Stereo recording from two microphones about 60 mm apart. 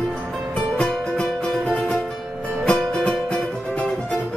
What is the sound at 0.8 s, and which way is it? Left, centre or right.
Music, centre.